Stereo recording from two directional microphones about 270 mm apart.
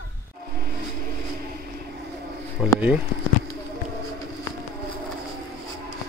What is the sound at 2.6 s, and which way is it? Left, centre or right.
Speech, centre.